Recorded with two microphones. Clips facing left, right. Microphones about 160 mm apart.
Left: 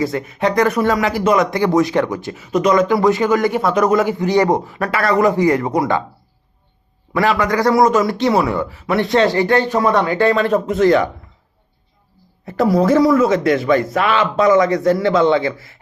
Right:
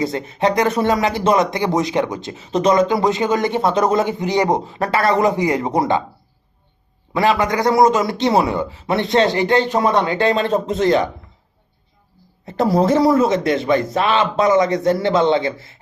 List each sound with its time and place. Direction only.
0.0 s speech: 25° right (ahead or behind)
7.1 s speech: 20° right (ahead or behind)
12.5 s speech: 30° right (ahead or behind)